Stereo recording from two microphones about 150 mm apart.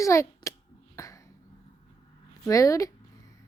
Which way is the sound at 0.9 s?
20° left (ahead or behind).